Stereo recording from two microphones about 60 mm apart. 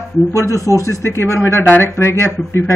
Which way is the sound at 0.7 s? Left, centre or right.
Right.